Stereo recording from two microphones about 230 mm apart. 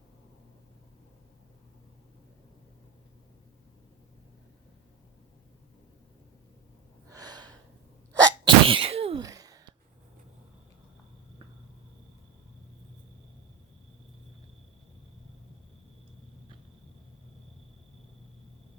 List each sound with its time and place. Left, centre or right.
7.1 s gasp: centre
8.2 s sneeze: right
9.2 s a sound: centre